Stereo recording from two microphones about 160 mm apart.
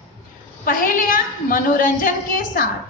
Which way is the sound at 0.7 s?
60° left (ahead or behind).